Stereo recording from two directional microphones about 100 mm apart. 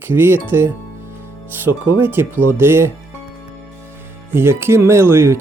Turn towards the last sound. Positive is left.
turn(degrees=-25)  # may be behind; listen again after turning